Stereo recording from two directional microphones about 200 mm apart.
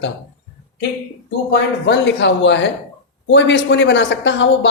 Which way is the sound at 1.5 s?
60° left (ahead or behind).